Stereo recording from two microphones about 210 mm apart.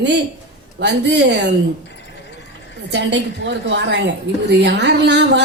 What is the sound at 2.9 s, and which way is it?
A woman's voice, 55° right (ahead or behind).